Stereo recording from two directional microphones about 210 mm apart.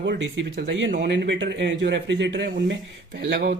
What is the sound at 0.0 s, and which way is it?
Speech, 60° right (ahead or behind).